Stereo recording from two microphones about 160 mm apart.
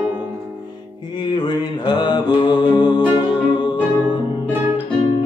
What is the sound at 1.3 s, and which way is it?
Music, 25° left (ahead or behind).